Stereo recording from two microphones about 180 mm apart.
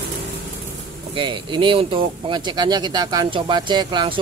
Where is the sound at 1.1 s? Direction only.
25° right (ahead or behind).